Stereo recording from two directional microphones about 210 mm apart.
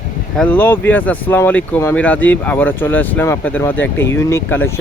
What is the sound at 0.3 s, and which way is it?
Speech, 5° left (ahead or behind).